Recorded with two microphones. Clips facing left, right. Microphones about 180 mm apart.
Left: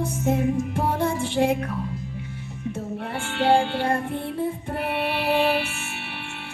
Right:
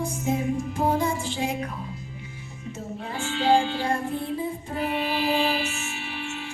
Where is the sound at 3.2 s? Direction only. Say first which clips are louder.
Left 1 dB; 60° left (ahead or behind).